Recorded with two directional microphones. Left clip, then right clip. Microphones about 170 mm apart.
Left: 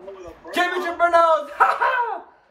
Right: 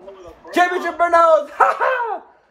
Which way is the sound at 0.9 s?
45° right (ahead or behind).